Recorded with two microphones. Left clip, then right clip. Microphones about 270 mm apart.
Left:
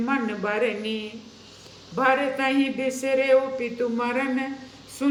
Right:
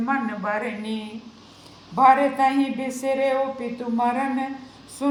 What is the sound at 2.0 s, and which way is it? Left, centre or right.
Speech, right.